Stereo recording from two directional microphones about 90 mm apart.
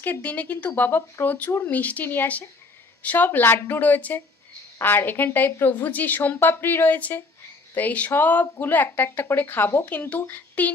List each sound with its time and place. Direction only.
0.0 s speech: 20° left (ahead or behind)